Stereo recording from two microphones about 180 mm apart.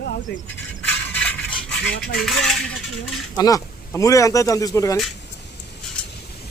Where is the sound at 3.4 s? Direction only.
20° left (ahead or behind).